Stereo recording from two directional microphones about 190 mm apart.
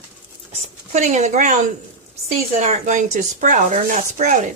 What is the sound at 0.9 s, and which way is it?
Speech, 35° right (ahead or behind).